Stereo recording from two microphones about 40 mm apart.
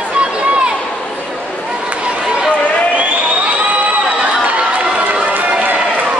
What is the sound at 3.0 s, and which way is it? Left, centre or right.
Crowd, right.